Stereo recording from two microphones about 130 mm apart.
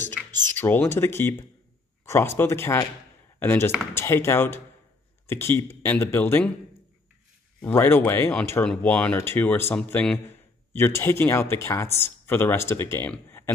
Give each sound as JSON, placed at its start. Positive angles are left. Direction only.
{"t": 0.6, "sound": "speech", "side_deg": 15}
{"t": 7.7, "sound": "speech", "side_deg": 15}
{"t": 13.1, "sound": "a sound", "side_deg": 15}